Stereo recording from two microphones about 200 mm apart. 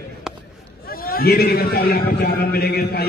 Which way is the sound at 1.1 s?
50° left (ahead or behind).